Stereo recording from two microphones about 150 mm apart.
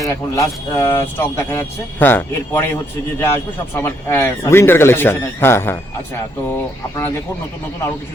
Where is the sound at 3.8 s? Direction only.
15° left (ahead or behind).